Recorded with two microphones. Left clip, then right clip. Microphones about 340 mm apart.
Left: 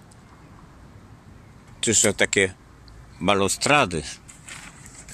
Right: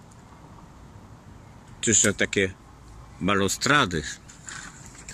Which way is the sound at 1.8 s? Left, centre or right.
Centre.